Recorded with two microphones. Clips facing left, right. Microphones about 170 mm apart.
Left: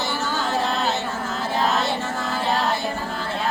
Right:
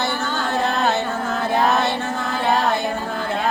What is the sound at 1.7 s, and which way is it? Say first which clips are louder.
Music: right 3 dB; 60° right (ahead or behind).